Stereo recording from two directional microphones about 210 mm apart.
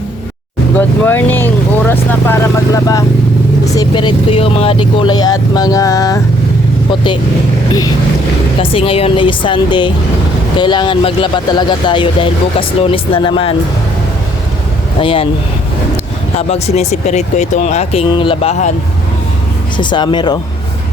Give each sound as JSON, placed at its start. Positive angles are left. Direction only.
{"t": 0.8, "sound": "speech", "side_deg": 10}
{"t": 3.8, "sound": "speech", "side_deg": 20}
{"t": 8.7, "sound": "speech", "side_deg": 25}
{"t": 15.0, "sound": "speech", "side_deg": 25}
{"t": 16.5, "sound": "speech", "side_deg": 30}
{"t": 19.7, "sound": "speech", "side_deg": 20}